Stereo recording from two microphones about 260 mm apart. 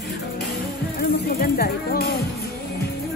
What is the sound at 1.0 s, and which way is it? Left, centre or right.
Music, left.